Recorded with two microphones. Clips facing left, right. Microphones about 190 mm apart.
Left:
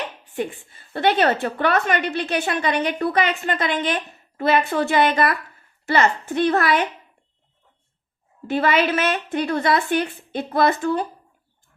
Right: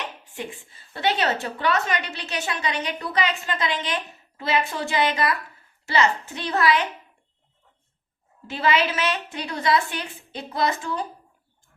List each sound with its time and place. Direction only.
0.3 s a woman's voice: 55° left (ahead or behind)
8.4 s a woman's voice: 55° left (ahead or behind)